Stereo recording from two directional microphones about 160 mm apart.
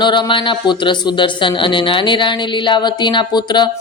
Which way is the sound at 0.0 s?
30° left (ahead or behind).